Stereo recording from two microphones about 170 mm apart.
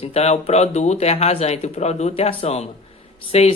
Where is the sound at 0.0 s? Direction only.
40° left (ahead or behind).